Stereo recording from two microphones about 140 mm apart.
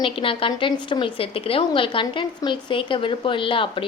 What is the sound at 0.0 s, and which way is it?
A woman's voice, 40° left (ahead or behind).